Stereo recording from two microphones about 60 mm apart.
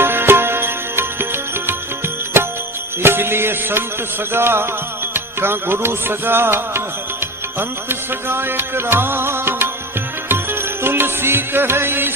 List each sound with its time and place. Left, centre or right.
0.0 s music: right
7.9 s music: right